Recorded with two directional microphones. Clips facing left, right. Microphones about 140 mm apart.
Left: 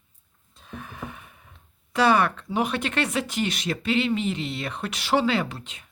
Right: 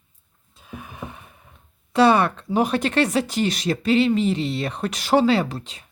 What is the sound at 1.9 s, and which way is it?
Speech, 30° right (ahead or behind).